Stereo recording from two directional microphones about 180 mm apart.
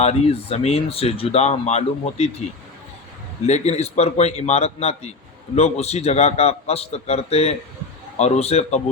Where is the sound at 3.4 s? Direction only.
40° left (ahead or behind).